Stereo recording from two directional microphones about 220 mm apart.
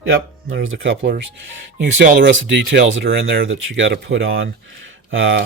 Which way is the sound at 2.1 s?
55° right (ahead or behind).